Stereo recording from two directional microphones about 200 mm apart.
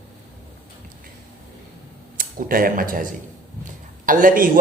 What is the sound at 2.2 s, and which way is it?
Speech, 45° right (ahead or behind).